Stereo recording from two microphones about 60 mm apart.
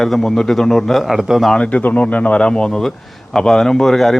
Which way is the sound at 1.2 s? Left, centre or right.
Centre.